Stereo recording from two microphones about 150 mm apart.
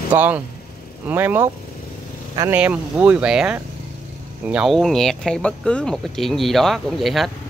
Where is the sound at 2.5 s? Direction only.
10° right (ahead or behind).